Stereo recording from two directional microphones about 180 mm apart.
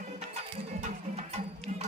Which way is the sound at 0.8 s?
40° right (ahead or behind).